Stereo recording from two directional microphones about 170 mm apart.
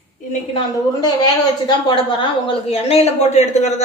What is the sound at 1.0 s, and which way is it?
A woman's voice, 25° left (ahead or behind).